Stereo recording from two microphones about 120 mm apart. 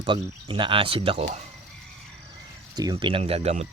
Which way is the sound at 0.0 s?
40° right (ahead or behind).